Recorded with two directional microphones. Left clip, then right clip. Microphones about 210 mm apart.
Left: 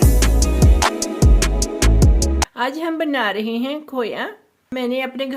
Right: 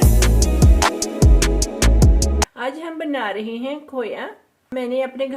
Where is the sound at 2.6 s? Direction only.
50° left (ahead or behind).